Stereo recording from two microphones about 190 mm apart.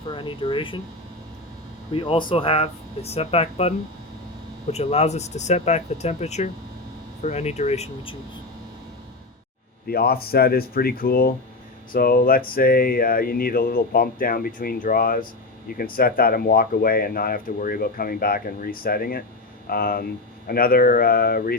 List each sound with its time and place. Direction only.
0.1 s speech: 25° left (ahead or behind)
1.9 s speech: 30° left (ahead or behind)
9.8 s speech: 55° left (ahead or behind)